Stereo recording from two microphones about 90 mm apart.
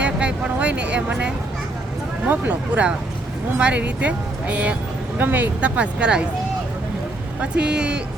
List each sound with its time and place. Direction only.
0.0 s music: 15° right (ahead or behind)
2.2 s speech: 20° right (ahead or behind)
7.4 s speech: 10° right (ahead or behind)